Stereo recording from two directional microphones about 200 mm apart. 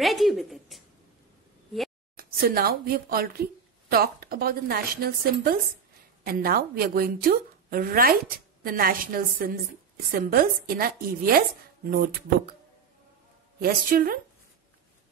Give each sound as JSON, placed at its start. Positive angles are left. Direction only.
{"t": 0.0, "sound": "a sound", "side_deg": 0}
{"t": 2.1, "sound": "a woman's voice", "side_deg": -50}
{"t": 13.6, "sound": "speech", "side_deg": -45}